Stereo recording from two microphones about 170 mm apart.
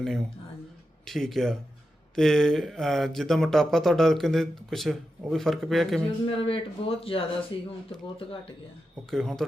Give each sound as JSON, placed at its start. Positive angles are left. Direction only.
{"t": 1.0, "sound": "speech", "side_deg": 0}
{"t": 6.2, "sound": "speech", "side_deg": 30}
{"t": 9.0, "sound": "speech", "side_deg": 0}